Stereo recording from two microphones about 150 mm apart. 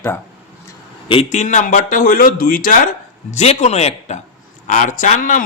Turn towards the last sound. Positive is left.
turn(degrees=60)  # may be behind; listen again after turning